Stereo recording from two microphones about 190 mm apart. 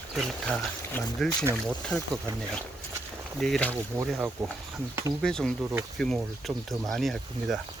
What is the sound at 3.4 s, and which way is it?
Speech, 5° left (ahead or behind).